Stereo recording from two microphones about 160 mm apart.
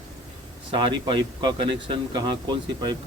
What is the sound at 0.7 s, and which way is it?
Speech, 30° right (ahead or behind).